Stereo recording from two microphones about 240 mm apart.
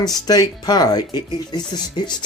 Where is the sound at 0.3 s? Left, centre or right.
Centre.